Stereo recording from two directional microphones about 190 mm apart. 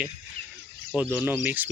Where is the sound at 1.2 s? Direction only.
10° right (ahead or behind).